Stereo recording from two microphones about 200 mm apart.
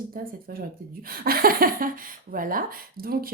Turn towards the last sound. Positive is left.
turn(degrees=-45)  # may be behind; listen again after turning